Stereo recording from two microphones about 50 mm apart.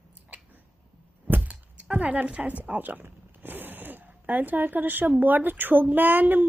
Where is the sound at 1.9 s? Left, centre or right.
Right.